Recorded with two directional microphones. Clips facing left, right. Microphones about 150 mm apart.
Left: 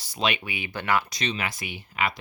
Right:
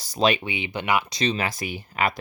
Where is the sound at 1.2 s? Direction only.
35° right (ahead or behind).